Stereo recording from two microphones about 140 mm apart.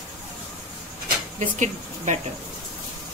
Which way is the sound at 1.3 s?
60° right (ahead or behind).